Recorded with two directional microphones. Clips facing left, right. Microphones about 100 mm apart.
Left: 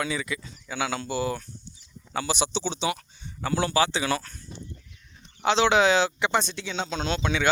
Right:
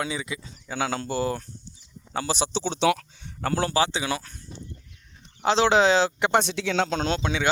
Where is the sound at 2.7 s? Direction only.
85° right.